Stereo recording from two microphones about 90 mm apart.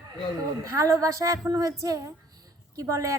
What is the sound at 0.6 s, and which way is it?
A woman's voice, 40° right (ahead or behind).